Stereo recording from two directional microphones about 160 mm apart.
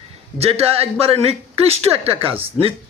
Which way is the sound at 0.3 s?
40° right (ahead or behind).